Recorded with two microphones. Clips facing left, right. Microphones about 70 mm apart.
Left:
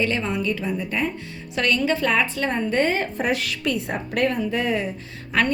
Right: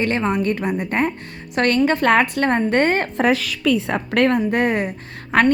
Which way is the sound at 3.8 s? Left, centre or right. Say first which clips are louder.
Right 5 dB; right.